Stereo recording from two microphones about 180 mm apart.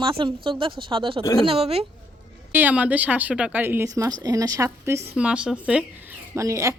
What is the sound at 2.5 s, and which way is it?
Speech, 10° right (ahead or behind).